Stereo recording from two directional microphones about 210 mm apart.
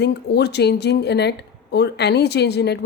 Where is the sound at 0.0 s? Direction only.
55° left (ahead or behind).